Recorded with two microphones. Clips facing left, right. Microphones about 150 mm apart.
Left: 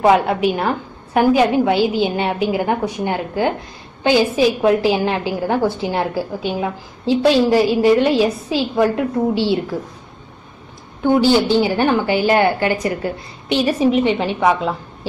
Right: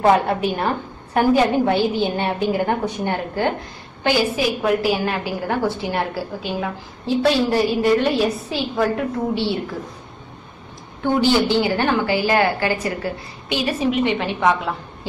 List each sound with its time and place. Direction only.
0.0 s a woman's voice: 15° left (ahead or behind)
11.5 s a woman's voice: 15° left (ahead or behind)